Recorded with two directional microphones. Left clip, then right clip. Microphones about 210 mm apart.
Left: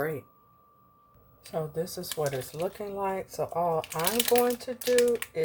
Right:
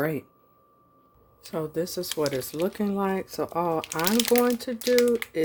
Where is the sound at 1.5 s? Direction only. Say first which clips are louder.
Right 3 dB; 45° right (ahead or behind).